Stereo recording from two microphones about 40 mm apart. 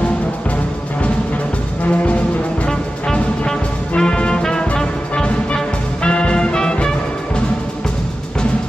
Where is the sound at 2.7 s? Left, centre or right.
Centre.